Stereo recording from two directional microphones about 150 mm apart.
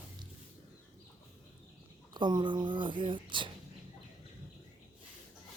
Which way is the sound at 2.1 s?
30° right (ahead or behind).